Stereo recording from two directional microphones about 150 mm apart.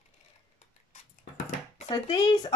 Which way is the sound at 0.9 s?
45° left (ahead or behind).